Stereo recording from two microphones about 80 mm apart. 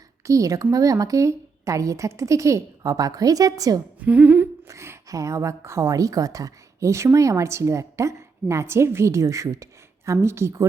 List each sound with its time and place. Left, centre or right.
0.3 s a woman's voice: right
4.0 s humming: centre
4.7 s a woman's voice: right